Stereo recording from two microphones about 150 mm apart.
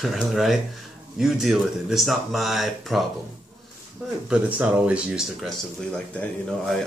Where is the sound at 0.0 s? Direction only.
Centre (ahead or behind).